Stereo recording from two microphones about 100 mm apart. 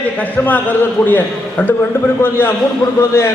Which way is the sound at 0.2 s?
15° left (ahead or behind).